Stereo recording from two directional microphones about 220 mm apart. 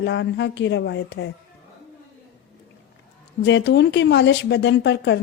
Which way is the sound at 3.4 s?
50° left (ahead or behind).